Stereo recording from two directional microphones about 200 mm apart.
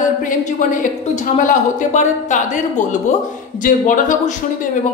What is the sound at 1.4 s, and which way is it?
A woman's voice, 40° left (ahead or behind).